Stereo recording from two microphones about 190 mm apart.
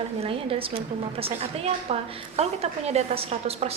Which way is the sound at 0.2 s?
30° right (ahead or behind).